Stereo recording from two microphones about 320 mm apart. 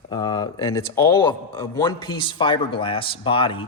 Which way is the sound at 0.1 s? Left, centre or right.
Centre.